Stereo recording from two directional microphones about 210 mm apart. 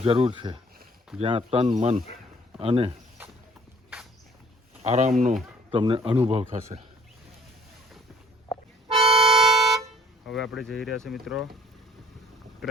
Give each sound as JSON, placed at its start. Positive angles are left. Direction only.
{"t": 0.0, "sound": "speech", "side_deg": -25}
{"t": 4.8, "sound": "speech", "side_deg": -30}
{"t": 5.7, "sound": "speech", "side_deg": -25}
{"t": 8.9, "sound": "music", "side_deg": -25}
{"t": 9.2, "sound": "a sound", "side_deg": 0}
{"t": 10.5, "sound": "speech", "side_deg": 0}